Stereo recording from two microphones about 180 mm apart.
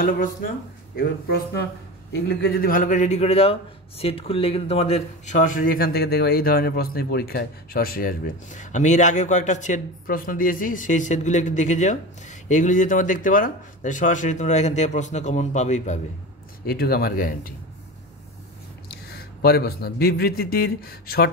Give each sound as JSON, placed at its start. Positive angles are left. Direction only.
{"t": 0.9, "sound": "a man's voice", "side_deg": 60}
{"t": 16.6, "sound": "a man's voice", "side_deg": 60}
{"t": 19.0, "sound": "a man's voice", "side_deg": 60}